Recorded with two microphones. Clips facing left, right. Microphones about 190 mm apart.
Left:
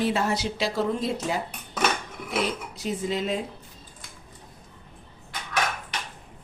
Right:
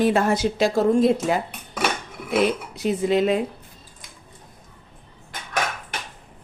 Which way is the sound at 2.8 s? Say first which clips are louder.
Right 9 dB; 60° right (ahead or behind).